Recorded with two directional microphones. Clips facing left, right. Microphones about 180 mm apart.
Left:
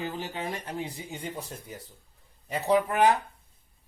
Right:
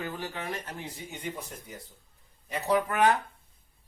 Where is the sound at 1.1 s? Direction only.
30° left (ahead or behind).